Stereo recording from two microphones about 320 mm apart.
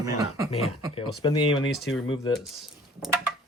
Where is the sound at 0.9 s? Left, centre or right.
Centre.